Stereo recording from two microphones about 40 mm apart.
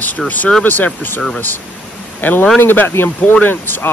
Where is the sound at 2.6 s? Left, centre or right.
Left.